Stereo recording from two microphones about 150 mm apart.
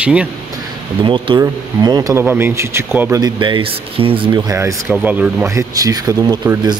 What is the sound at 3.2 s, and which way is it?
Speech, 30° right (ahead or behind).